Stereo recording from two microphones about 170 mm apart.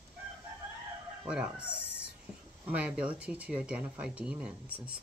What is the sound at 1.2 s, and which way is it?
Speech, 5° right (ahead or behind).